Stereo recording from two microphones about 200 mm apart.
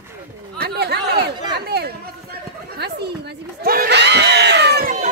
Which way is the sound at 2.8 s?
55° right (ahead or behind).